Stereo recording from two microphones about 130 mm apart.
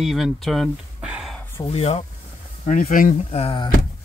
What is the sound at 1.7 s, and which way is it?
Speech, 50° left (ahead or behind).